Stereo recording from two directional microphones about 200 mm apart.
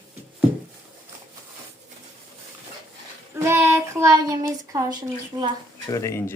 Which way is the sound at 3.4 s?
15° right (ahead or behind).